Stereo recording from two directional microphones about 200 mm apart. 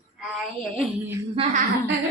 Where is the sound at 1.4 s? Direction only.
25° right (ahead or behind).